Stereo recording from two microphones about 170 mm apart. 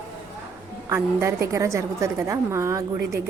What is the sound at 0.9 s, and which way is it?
A woman's voice, 15° right (ahead or behind).